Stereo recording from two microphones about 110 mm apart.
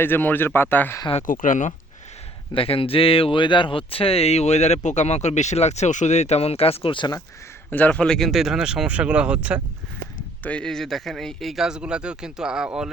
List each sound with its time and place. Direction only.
0.0 s speech: 20° left (ahead or behind)
2.6 s speech: 55° left (ahead or behind)
7.7 s speech: 15° left (ahead or behind); by 9.6 s 10° right (ahead or behind)
10.4 s speech: 10° left (ahead or behind); by 12.9 s 5° right (ahead or behind)